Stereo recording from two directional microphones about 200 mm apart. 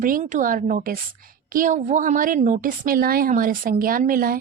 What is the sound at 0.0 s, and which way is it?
A woman's voice, 40° right (ahead or behind).